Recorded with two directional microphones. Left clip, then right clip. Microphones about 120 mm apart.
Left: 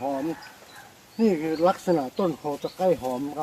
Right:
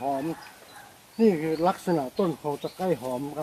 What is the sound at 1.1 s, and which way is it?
Speech, 15° right (ahead or behind).